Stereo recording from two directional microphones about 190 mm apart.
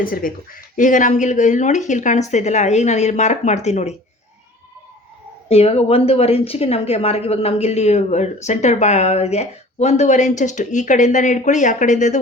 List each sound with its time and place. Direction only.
0.0 s a woman's voice: 50° left (ahead or behind)
5.5 s a woman's voice: 30° left (ahead or behind)